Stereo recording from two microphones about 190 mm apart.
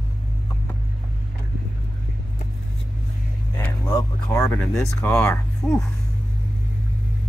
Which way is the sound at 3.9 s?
20° left (ahead or behind).